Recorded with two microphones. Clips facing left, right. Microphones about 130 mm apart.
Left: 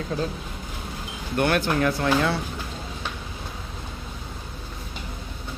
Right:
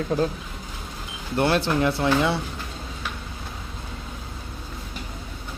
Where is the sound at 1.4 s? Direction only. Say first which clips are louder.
Right 1 dB; 30° right (ahead or behind).